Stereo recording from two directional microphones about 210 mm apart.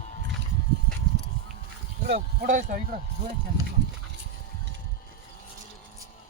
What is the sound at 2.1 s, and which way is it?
Speech, 40° right (ahead or behind).